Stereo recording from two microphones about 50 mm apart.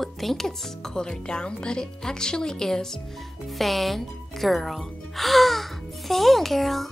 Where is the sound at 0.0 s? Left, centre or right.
Centre.